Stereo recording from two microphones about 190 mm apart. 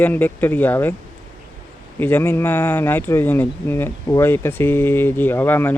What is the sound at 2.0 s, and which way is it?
Speech, 10° left (ahead or behind).